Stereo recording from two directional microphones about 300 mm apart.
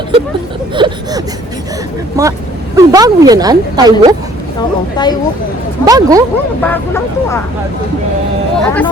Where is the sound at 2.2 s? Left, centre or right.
Centre.